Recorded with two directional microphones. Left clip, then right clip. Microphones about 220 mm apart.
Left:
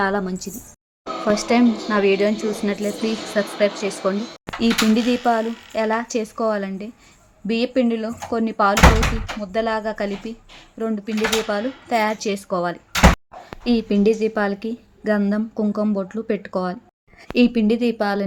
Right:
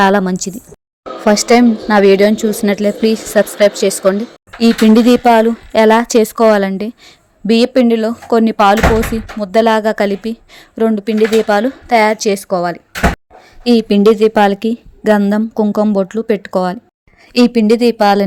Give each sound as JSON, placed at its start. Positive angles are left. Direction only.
{"t": 0.0, "sound": "a woman's voice", "side_deg": -40}